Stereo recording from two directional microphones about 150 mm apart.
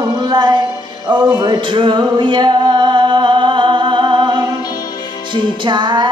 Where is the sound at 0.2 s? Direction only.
25° right (ahead or behind).